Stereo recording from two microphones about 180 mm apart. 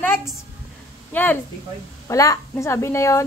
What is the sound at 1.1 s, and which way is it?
A woman's voice, 10° left (ahead or behind).